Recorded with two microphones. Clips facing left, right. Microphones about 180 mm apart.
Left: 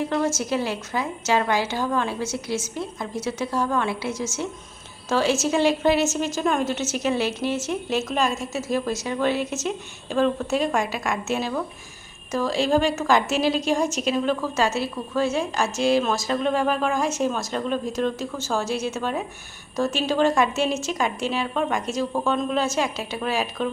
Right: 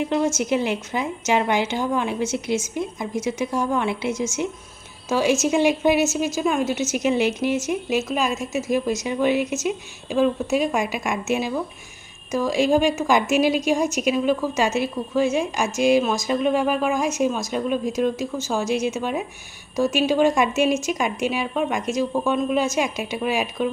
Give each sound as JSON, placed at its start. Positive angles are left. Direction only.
{"t": 0.0, "sound": "a woman's voice", "side_deg": -20}